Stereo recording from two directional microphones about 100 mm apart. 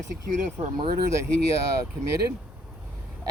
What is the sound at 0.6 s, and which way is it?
Speech, 80° right.